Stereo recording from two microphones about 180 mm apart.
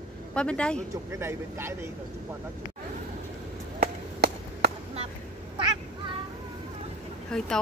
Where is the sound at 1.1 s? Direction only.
15° right (ahead or behind).